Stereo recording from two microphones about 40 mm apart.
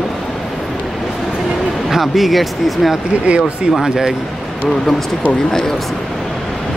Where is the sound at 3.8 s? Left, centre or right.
Centre.